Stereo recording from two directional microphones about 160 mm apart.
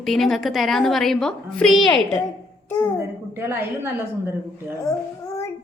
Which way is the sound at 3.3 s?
15° right (ahead or behind).